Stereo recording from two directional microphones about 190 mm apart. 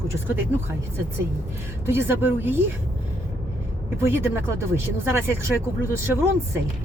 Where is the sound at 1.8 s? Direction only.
10° right (ahead or behind).